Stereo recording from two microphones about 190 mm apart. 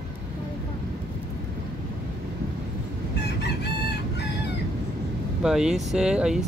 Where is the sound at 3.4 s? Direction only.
60° left (ahead or behind).